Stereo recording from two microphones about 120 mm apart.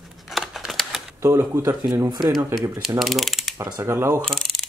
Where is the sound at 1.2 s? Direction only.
25° right (ahead or behind).